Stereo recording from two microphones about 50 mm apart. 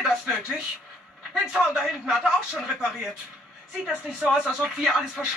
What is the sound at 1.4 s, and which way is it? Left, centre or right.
Speech, centre.